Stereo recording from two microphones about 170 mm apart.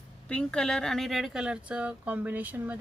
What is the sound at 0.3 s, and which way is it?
Speech, 5° left (ahead or behind).